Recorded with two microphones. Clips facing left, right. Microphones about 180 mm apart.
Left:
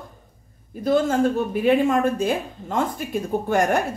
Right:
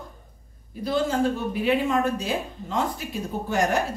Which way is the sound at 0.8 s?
50° left (ahead or behind).